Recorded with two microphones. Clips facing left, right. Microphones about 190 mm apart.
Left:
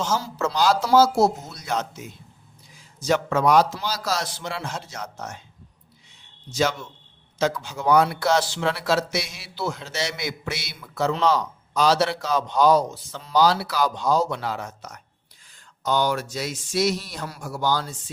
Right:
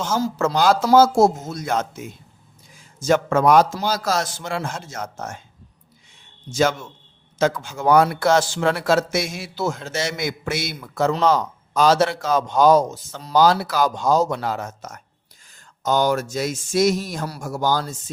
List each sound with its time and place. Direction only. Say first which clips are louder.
0.2 s speech: right 4 dB; 50° right (ahead or behind)
6.5 s speech: right 4 dB; 50° right (ahead or behind)